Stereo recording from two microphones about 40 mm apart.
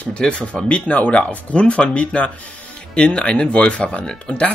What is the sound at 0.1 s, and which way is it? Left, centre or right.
Speech, left.